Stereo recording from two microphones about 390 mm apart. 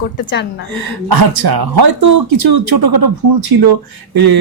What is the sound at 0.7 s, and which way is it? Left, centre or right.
Speech, right.